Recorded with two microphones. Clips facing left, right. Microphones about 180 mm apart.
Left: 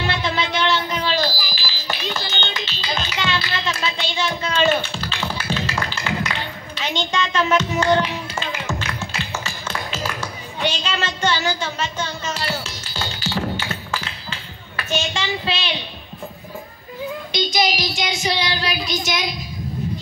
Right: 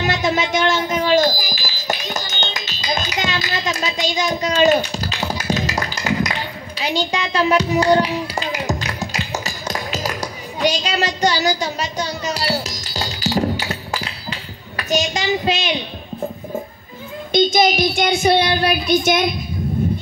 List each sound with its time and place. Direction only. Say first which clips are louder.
0.0 s music: right 4 dB; 45° right (ahead or behind)
7.3 s music: right 4 dB; 35° right (ahead or behind)
17.3 s child singing: right 7 dB; 50° right (ahead or behind)